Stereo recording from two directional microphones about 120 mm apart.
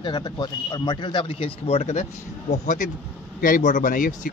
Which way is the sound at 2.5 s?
90° left.